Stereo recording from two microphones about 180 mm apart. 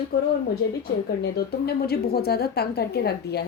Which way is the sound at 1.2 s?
65° left (ahead or behind).